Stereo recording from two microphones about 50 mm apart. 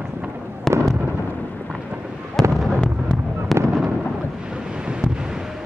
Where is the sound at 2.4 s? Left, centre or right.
Centre.